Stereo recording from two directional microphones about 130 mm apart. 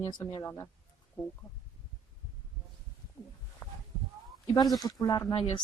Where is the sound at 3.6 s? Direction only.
25° left (ahead or behind).